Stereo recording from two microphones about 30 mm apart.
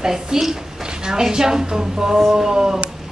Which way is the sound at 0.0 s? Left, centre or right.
Centre.